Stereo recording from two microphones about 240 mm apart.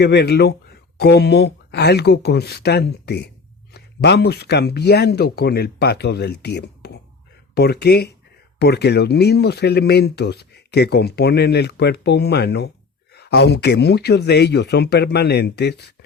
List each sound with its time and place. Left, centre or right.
0.0 s speech: left